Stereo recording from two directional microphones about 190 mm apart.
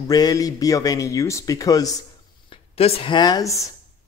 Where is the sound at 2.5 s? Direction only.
30° left (ahead or behind).